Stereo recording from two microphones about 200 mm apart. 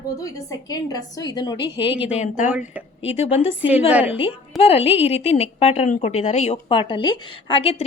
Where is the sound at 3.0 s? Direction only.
30° left (ahead or behind).